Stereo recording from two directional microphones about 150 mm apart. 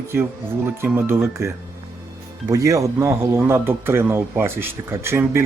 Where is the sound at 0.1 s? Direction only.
15° right (ahead or behind).